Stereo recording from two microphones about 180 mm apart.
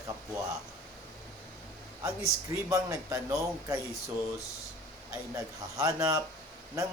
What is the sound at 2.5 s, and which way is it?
A man's voice, 15° right (ahead or behind).